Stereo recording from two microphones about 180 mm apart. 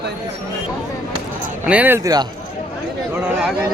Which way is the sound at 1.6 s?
10° right (ahead or behind).